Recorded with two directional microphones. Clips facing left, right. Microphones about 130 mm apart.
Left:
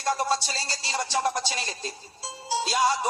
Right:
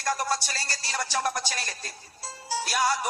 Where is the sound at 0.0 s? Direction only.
25° left (ahead or behind).